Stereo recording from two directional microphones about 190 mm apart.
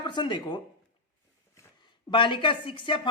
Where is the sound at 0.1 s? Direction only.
25° left (ahead or behind).